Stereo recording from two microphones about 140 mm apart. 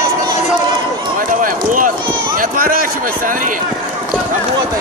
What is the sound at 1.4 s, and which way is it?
A man's voice, 70° right (ahead or behind).